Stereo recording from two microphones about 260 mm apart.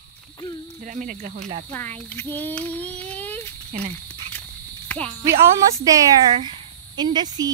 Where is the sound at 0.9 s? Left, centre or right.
Right.